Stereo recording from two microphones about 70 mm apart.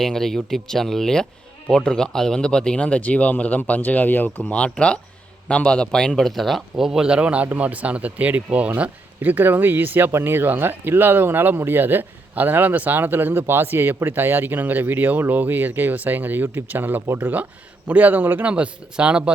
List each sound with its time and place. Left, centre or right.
0.0 s speech: centre